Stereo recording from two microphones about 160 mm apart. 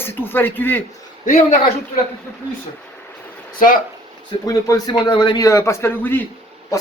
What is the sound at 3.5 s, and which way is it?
Speech, 60° left (ahead or behind).